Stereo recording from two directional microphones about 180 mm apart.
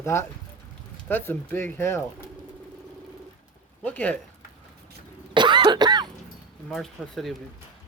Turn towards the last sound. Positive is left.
turn(degrees=0)  # may be behind; listen again after turning